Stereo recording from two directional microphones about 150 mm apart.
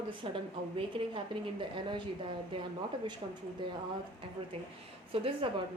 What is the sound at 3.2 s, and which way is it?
A woman's voice, 35° right (ahead or behind).